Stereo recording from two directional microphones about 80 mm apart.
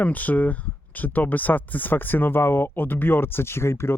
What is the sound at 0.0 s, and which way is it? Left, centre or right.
Speech, left.